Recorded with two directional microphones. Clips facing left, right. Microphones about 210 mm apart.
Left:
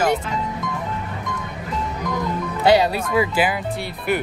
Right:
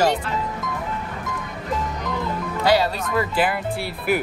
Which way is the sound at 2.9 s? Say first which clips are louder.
Left 3 dB; 5° left (ahead or behind).